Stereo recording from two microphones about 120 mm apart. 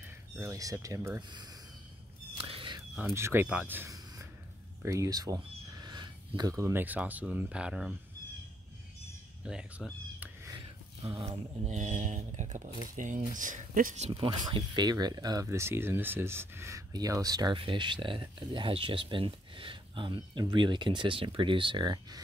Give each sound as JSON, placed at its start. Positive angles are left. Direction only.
{"t": 0.4, "sound": "speech", "side_deg": -30}
{"t": 2.3, "sound": "a sound", "side_deg": -50}
{"t": 3.1, "sound": "speech", "side_deg": -20}
{"t": 4.8, "sound": "speech", "side_deg": -25}
{"t": 9.4, "sound": "speech", "side_deg": -5}
{"t": 11.2, "sound": "speech", "side_deg": -75}
{"t": 14.1, "sound": "speech", "side_deg": -40}
{"t": 15.4, "sound": "speech", "side_deg": -20}